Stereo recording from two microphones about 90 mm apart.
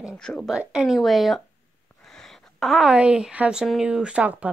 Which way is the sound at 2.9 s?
15° right (ahead or behind).